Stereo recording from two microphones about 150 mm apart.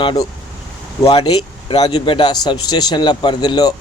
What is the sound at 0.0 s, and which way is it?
Speech, 30° left (ahead or behind).